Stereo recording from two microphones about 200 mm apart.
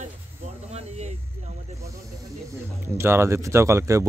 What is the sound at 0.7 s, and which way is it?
Snake, 35° right (ahead or behind).